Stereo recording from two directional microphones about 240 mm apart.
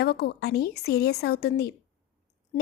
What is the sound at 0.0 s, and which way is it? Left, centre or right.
Speech, left.